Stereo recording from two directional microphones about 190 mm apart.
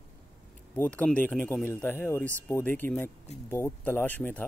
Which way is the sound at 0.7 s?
5° left (ahead or behind).